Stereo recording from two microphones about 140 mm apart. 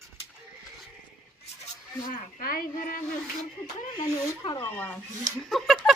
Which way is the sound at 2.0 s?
85° left.